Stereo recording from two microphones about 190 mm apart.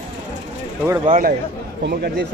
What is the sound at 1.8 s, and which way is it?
Speech, 60° right (ahead or behind).